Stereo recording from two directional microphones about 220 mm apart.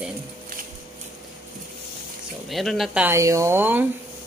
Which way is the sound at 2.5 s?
Centre (ahead or behind).